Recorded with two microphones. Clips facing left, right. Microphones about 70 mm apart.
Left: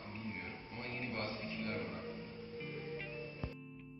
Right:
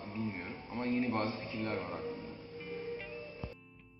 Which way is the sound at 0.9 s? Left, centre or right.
Right.